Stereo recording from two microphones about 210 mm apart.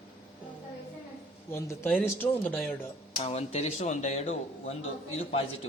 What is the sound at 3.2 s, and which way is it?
A man's voice, 30° left (ahead or behind).